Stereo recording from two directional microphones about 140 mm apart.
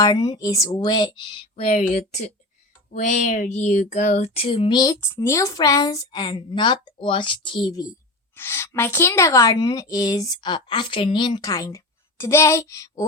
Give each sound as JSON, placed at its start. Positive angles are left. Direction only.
{"t": 0.0, "sound": "a woman's voice", "side_deg": 30}
{"t": 1.5, "sound": "speech", "side_deg": 55}
{"t": 4.9, "sound": "a woman's voice", "side_deg": 20}
{"t": 8.4, "sound": "a woman's voice", "side_deg": 15}